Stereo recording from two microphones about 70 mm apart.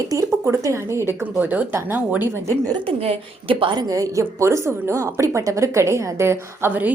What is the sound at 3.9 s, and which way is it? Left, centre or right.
A woman's voice, right.